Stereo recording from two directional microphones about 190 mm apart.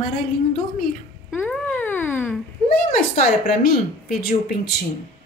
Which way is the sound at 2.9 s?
50° left (ahead or behind).